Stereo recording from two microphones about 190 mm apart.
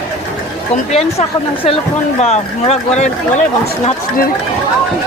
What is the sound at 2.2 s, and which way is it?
Speech, 35° left (ahead or behind).